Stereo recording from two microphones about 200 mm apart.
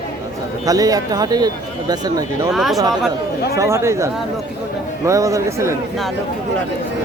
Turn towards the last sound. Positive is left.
turn(degrees=-15)  # may be behind; listen again after turning